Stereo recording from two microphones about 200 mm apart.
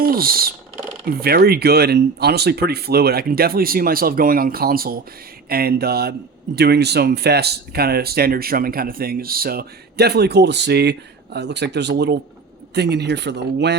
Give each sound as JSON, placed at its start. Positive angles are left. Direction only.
{"t": 0.1, "sound": "speech", "side_deg": -45}